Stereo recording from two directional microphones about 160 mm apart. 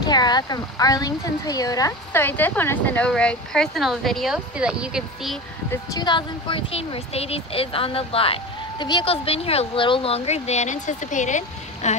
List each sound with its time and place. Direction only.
0.0 s speech: 25° left (ahead or behind); by 5.4 s 5° right (ahead or behind)
5.7 s speech: 25° left (ahead or behind); by 11.9 s 50° left (ahead or behind)